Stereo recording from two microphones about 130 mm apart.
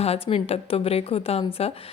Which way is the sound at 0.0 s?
50° left (ahead or behind).